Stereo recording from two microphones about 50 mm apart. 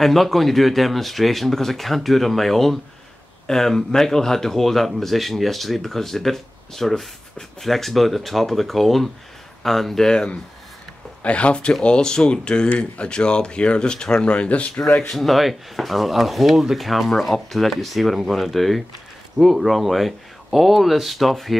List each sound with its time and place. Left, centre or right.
0.0 s speech: centre
14.3 s speech: left
15.0 s speech: centre